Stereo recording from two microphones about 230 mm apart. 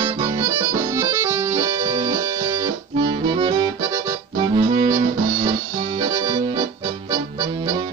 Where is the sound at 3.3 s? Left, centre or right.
Centre.